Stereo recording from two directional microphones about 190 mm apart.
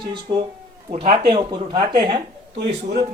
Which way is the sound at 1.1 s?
25° right (ahead or behind).